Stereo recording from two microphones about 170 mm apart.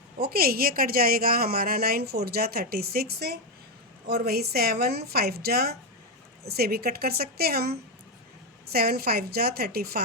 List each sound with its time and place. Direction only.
0.2 s a woman's voice: 60° right (ahead or behind)